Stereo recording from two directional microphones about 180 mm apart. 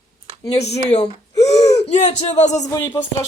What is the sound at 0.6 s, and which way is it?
Speech, 35° left (ahead or behind).